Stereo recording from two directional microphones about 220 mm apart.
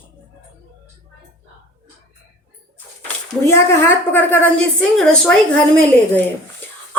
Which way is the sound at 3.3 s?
10° left (ahead or behind).